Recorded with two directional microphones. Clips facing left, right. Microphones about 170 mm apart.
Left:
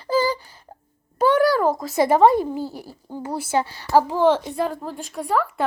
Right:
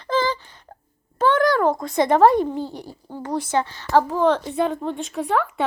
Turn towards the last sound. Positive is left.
turn(degrees=0)  # may be behind; listen again after turning